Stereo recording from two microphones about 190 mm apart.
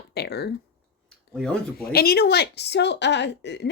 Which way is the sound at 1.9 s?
55° left (ahead or behind).